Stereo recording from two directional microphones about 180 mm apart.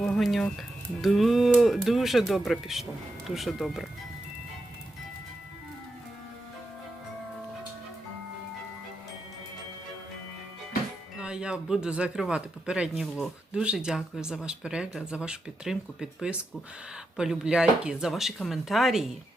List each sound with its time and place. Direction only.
0.0 s speech: centre (ahead or behind)
11.2 s speech: 5° right (ahead or behind)